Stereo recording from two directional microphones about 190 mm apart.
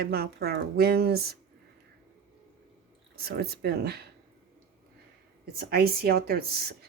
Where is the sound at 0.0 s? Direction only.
55° right (ahead or behind).